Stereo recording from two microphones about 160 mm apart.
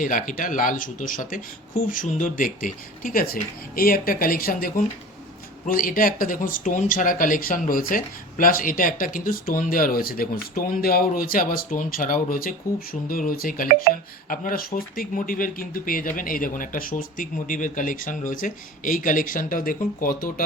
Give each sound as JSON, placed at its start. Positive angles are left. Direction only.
{"t": 0.0, "sound": "speech", "side_deg": 55}